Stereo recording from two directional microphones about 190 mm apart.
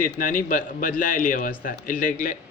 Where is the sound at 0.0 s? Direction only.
45° left (ahead or behind).